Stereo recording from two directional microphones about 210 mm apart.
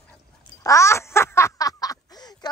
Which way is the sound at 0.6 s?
15° left (ahead or behind).